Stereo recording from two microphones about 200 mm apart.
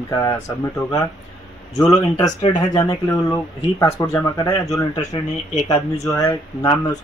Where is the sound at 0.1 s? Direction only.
15° left (ahead or behind).